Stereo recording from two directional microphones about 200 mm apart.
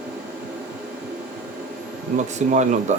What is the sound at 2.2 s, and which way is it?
Speech, 35° right (ahead or behind).